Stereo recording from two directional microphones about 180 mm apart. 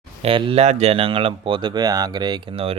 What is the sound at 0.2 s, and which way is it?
Speech, 30° right (ahead or behind).